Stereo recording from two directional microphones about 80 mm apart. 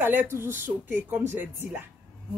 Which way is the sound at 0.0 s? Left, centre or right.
Right.